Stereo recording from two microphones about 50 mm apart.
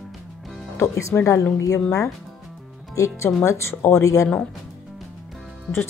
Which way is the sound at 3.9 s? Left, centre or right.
Left.